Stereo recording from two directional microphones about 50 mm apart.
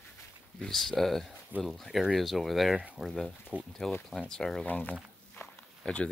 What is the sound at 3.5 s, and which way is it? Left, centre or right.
Speech, left.